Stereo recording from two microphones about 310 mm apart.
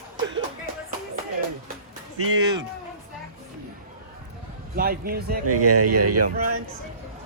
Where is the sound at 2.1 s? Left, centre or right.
Right.